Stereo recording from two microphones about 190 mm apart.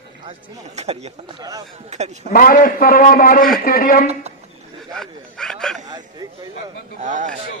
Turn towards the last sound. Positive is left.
turn(degrees=-40)  # may be behind; listen again after turning